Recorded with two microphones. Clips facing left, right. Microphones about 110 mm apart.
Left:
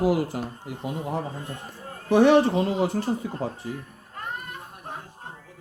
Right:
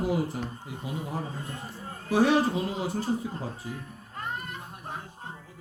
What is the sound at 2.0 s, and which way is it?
Speech, 70° left (ahead or behind).